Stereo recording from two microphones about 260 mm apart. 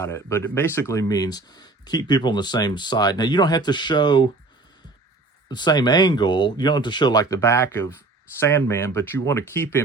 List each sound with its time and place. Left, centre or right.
0.0 s speech: centre
5.5 s speech: centre